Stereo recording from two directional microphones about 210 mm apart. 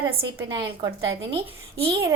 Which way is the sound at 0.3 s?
20° right (ahead or behind).